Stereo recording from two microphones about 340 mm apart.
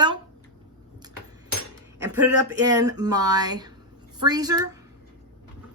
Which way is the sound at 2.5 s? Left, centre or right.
Centre.